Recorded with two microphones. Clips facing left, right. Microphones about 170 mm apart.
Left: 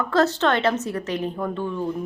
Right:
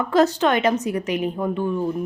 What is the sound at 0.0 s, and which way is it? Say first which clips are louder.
Speech: right 2 dB; 15° right (ahead or behind).